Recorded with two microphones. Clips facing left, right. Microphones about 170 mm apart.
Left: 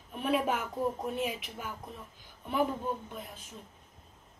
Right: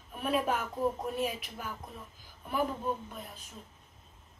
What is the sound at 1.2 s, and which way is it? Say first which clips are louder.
Speech: right 1 dB; 20° left (ahead or behind).